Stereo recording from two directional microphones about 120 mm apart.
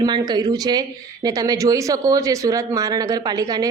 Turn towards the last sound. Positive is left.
turn(degrees=-30)  # may be behind; listen again after turning